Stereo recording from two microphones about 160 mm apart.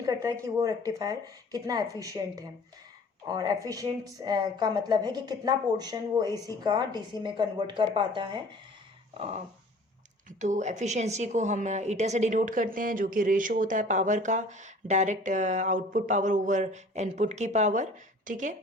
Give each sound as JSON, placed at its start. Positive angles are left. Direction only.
{"t": 0.0, "sound": "a woman's voice", "side_deg": -20}
{"t": 9.1, "sound": "a sound", "side_deg": -40}
{"t": 10.2, "sound": "a woman's voice", "side_deg": -50}